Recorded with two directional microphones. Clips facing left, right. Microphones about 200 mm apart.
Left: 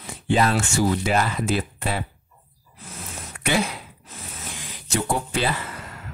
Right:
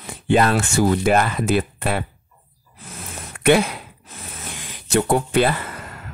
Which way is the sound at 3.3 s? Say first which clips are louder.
Right 8 dB; 60° right (ahead or behind).